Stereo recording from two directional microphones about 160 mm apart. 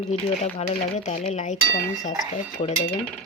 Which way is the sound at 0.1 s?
45° left (ahead or behind).